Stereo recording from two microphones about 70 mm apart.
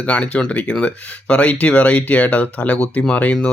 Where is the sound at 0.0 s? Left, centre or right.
Centre.